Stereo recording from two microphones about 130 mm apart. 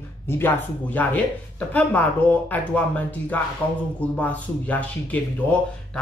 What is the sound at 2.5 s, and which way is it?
Speech, 10° left (ahead or behind).